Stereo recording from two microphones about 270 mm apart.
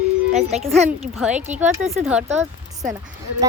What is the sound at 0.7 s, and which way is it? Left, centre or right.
Speech, centre.